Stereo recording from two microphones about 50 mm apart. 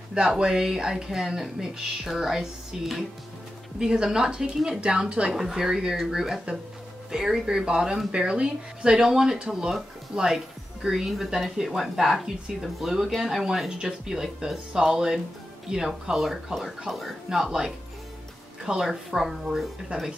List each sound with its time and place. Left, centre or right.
0.4 s speech: centre
5.3 s speech: centre
18.8 s speech: centre
19.9 s speech: right